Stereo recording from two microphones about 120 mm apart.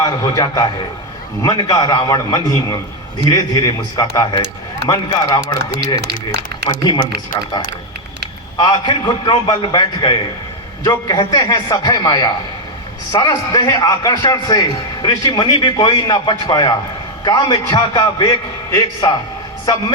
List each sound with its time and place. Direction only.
0.0 s a man's voice: 30° left (ahead or behind)
8.6 s a man's voice: 40° left (ahead or behind)